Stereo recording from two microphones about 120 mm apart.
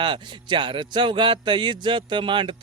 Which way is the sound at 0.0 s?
45° right (ahead or behind).